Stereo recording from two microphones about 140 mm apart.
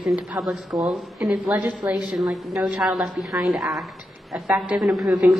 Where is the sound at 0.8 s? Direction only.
Centre (ahead or behind).